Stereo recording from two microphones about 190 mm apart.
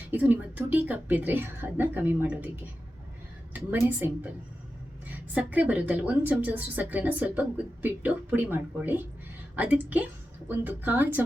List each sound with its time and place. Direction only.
0.1 s a woman's voice: 10° right (ahead or behind)
3.5 s a woman's voice: 10° right (ahead or behind)